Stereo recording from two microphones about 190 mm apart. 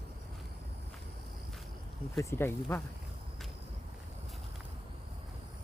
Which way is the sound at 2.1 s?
10° left (ahead or behind).